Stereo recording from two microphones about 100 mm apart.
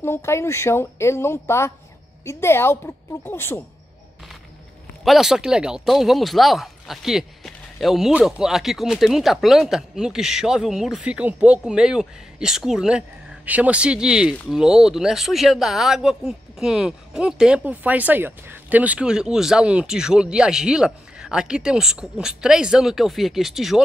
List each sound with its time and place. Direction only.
0.0 s a woman's voice: 25° left (ahead or behind)
5.0 s speech: 5° right (ahead or behind)
17.6 s speech: 15° right (ahead or behind)